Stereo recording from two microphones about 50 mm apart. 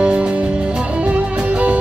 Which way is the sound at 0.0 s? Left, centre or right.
Right.